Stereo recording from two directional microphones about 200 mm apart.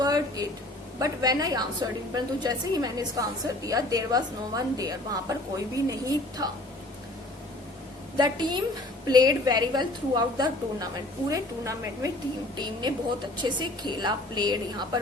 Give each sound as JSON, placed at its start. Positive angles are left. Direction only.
{"t": 0.0, "sound": "a sound", "side_deg": -20}
{"t": 0.9, "sound": "a woman's voice", "side_deg": -20}
{"t": 8.2, "sound": "a woman's voice", "side_deg": -20}